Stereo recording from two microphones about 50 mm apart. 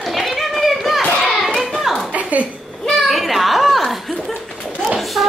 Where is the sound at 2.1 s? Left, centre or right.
Right.